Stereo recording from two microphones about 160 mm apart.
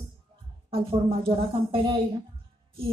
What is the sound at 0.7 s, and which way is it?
Speech, 35° right (ahead or behind).